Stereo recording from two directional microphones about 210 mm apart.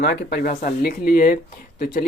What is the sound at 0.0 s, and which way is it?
Speech, 50° left (ahead or behind).